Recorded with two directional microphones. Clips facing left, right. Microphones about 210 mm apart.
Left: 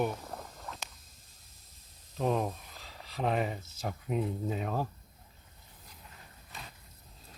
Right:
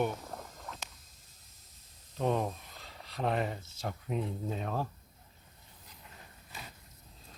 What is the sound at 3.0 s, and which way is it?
Speech, 5° left (ahead or behind).